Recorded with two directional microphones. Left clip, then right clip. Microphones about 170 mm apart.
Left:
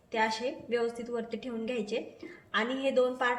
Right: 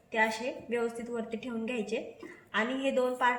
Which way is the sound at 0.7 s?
35° left (ahead or behind).